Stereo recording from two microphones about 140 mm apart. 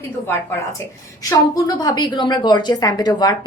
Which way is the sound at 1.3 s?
25° left (ahead or behind).